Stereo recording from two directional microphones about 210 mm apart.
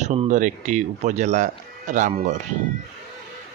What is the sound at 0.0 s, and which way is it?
Speech, 35° right (ahead or behind).